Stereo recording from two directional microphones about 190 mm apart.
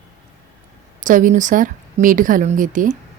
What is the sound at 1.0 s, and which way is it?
A woman's voice, 45° right (ahead or behind).